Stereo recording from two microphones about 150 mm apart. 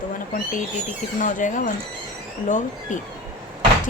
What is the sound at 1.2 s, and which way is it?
Speech, 60° left (ahead or behind).